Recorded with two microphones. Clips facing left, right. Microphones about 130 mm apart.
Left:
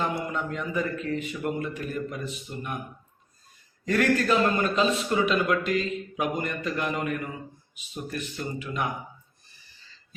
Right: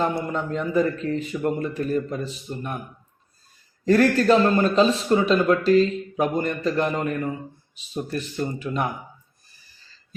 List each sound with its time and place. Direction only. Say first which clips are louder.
0.0 s a man's voice: right 4 dB; 35° right (ahead or behind)
3.8 s a man's voice: right 6 dB; 35° right (ahead or behind)